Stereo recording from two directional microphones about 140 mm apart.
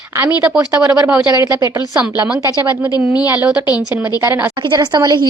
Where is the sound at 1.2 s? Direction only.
30° left (ahead or behind).